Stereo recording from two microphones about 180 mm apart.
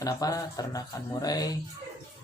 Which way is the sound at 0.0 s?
20° left (ahead or behind).